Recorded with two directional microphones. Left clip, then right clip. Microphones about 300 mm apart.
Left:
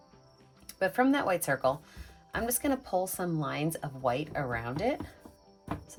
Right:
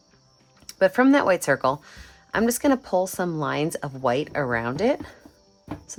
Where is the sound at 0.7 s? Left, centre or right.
Right.